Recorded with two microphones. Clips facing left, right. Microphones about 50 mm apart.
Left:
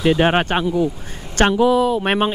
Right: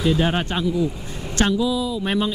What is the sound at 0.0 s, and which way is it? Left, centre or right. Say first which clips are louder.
Speech: left 5 dB; left.